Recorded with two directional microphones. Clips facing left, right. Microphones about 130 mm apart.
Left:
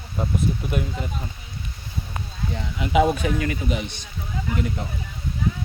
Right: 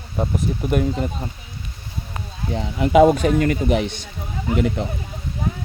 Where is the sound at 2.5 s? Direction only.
45° right (ahead or behind).